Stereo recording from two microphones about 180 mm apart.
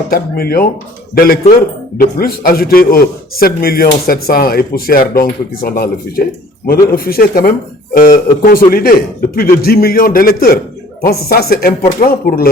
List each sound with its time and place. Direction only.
0.1 s a man's voice: 55° left (ahead or behind)